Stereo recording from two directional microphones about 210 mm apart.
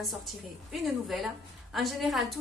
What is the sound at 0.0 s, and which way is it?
A woman's voice, centre (ahead or behind).